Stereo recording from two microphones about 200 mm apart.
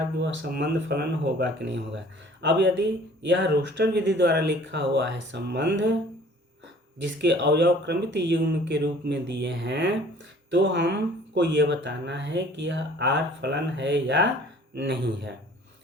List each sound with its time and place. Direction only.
0.2 s speech: 55° right (ahead or behind)
7.0 s speech: 60° right (ahead or behind)